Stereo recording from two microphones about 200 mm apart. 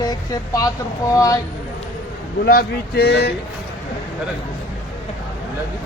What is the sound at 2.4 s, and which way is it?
Speech, 50° left (ahead or behind).